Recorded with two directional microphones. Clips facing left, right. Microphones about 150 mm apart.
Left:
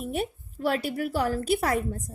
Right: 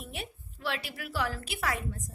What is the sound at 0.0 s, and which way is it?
A woman's voice, 45° left (ahead or behind).